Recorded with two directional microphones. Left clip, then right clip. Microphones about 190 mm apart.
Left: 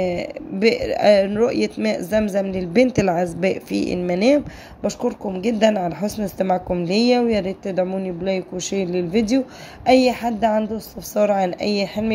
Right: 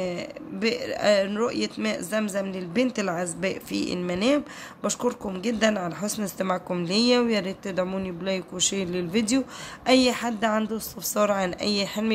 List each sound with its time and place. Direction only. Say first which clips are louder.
0.0 s speech: left 8 dB; 20° left (ahead or behind)
4.8 s a woman's voice: left 4 dB; 10° left (ahead or behind)